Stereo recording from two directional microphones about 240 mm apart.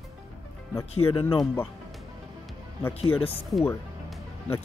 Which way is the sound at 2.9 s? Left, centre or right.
Left.